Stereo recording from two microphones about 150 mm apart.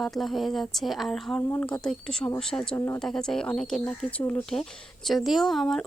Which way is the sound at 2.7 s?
15° left (ahead or behind).